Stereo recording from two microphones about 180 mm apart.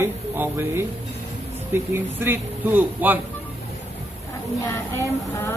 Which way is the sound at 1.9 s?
10° right (ahead or behind).